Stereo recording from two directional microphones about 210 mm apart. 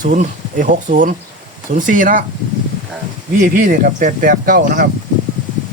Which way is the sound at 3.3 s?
40° right (ahead or behind).